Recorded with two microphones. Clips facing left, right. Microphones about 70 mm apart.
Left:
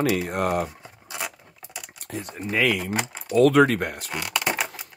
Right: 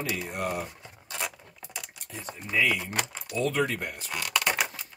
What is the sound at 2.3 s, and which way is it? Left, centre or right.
Speech, left.